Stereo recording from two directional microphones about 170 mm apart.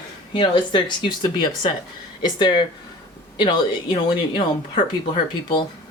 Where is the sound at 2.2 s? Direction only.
25° left (ahead or behind).